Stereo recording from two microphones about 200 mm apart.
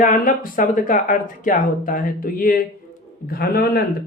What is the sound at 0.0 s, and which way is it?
Speech, 45° left (ahead or behind).